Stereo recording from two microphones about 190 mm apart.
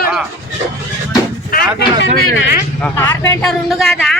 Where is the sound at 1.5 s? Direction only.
50° left (ahead or behind).